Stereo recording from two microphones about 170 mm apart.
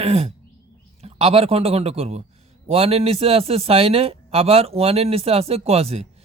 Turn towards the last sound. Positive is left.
turn(degrees=-35)  # may be behind; listen again after turning